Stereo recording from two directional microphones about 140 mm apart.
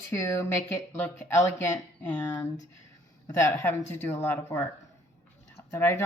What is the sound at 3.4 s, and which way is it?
Speech, 15° left (ahead or behind).